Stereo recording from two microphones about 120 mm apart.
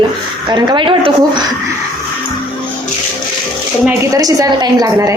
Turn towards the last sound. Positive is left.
turn(degrees=-30)  # may be behind; listen again after turning